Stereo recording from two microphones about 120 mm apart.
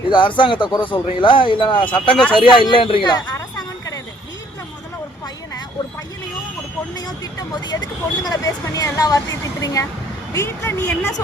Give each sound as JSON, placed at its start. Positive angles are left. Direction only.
{"t": 0.1, "sound": "speech", "side_deg": 40}
{"t": 7.5, "sound": "speech", "side_deg": 35}